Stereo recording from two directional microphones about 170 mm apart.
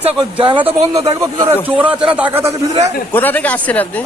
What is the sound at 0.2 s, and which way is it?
Speech, 25° right (ahead or behind).